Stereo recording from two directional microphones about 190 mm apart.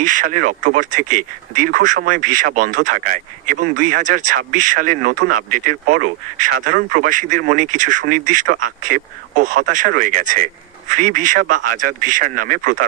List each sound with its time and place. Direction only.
0.0 s speech: 45° right (ahead or behind)